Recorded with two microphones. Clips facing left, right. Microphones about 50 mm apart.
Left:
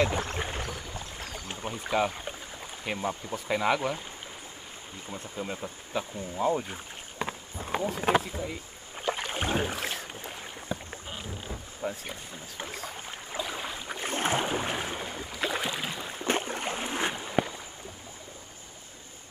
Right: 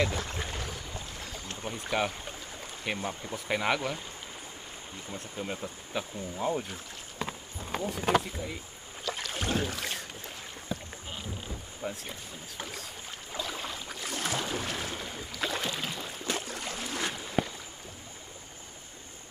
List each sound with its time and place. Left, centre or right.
0.0 s a sound: left
1.3 s boat: centre
1.7 s speech: centre
3.0 s speech: centre
3.4 s speech: right
3.7 s speech: centre
5.6 s speech: centre
6.7 s rowboat: centre
8.2 s speech: centre
9.0 s boat: left; by 11.1 s centre
11.8 s rowboat: centre
13.9 s boat: left; by 16.1 s centre
16.3 s boat: left